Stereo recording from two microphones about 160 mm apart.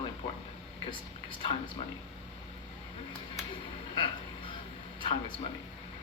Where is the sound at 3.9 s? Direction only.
30° left (ahead or behind).